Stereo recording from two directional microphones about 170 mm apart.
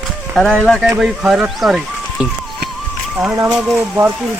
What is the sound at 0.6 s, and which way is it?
Speech, centre (ahead or behind).